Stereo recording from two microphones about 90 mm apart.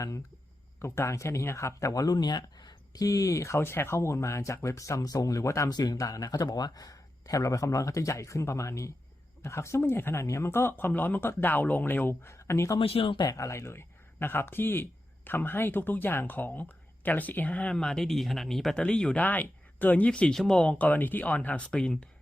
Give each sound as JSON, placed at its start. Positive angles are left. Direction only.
{"t": 0.8, "sound": "speech", "side_deg": 30}
{"t": 12.8, "sound": "speech", "side_deg": 90}
{"t": 13.2, "sound": "speech", "side_deg": 35}